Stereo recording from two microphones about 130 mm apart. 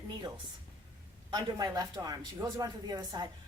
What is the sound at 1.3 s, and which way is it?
Speech, 30° right (ahead or behind).